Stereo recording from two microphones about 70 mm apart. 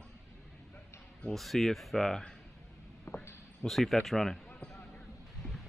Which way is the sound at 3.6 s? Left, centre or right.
Centre.